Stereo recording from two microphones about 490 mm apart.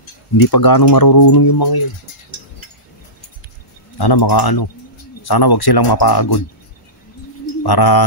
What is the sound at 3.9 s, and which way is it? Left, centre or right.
Speech, left.